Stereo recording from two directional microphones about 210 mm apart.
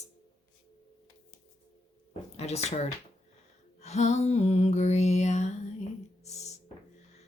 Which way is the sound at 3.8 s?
30° left (ahead or behind).